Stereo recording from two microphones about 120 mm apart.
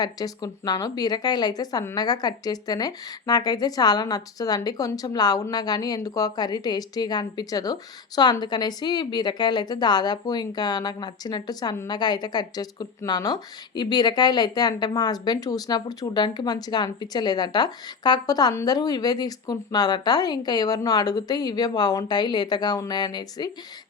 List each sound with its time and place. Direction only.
0.0 s speech: 35° left (ahead or behind)